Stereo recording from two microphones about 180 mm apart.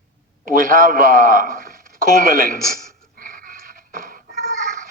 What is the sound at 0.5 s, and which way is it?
A man's voice, 50° right (ahead or behind).